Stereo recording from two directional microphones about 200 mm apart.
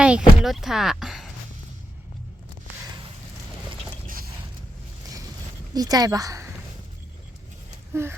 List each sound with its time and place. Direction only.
0.0 s speech: 5° right (ahead or behind)
4.0 s mechanisms: 45° right (ahead or behind)
5.7 s a woman's voice: 20° right (ahead or behind)
8.0 s a woman's voice: 15° right (ahead or behind)